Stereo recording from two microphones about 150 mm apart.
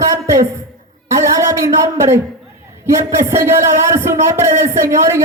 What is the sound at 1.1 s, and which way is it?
Speech, 20° right (ahead or behind).